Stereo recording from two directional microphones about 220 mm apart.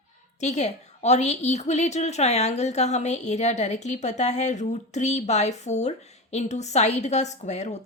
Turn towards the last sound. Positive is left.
turn(degrees=30)  # may be behind; listen again after turning